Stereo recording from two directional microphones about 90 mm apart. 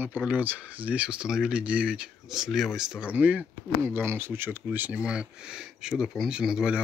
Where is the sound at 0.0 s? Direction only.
20° right (ahead or behind).